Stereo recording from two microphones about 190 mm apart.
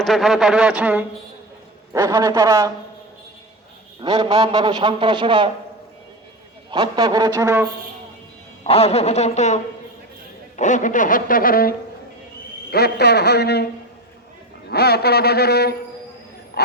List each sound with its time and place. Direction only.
0.0 s a man's voice: centre (ahead or behind)
1.9 s a man's voice: 20° right (ahead or behind)
4.0 s a man's voice: 25° right (ahead or behind)
6.7 s a man's voice: 20° right (ahead or behind)
8.6 s speech: 30° left (ahead or behind)
10.6 s speech: 40° left (ahead or behind)
12.7 s a man's voice: 60° left (ahead or behind)
14.7 s a man's voice: 55° left (ahead or behind)
16.5 s a sound: 55° left (ahead or behind)